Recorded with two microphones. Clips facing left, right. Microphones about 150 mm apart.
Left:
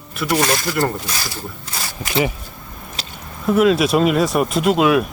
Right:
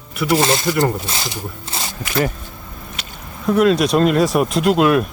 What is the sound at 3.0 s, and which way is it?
Squish, 30° left (ahead or behind).